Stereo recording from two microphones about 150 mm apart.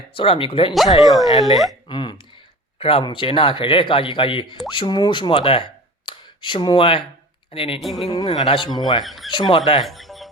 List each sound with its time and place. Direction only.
0.2 s speech: 35° left (ahead or behind)
0.7 s speech: centre (ahead or behind)
1.9 s speech: 35° left (ahead or behind)
7.8 s speech: centre (ahead or behind)
8.1 s a man's voice: 25° left (ahead or behind)
9.0 s speech: centre (ahead or behind)
9.3 s speech: 30° left (ahead or behind)
9.8 s music: centre (ahead or behind)